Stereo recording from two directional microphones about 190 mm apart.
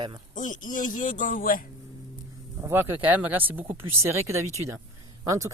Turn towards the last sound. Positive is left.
turn(degrees=-15)  # may be behind; listen again after turning